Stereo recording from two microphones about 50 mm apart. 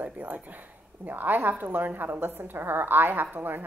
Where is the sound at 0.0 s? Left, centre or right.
Right.